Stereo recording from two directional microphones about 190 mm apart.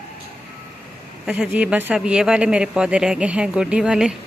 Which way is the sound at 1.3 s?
5° right (ahead or behind).